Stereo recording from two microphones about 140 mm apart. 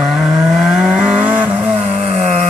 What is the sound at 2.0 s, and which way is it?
Vehicle, 50° right (ahead or behind).